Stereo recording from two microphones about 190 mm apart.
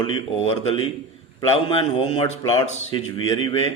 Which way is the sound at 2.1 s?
25° left (ahead or behind).